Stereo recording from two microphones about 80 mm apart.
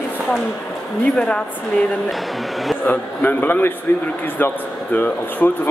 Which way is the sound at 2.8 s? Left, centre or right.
Left.